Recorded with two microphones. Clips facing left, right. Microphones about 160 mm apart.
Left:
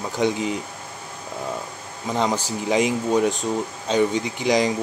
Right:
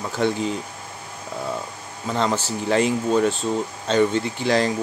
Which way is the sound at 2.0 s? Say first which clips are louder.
Even; 15° left (ahead or behind).